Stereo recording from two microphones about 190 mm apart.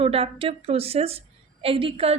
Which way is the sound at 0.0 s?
30° right (ahead or behind).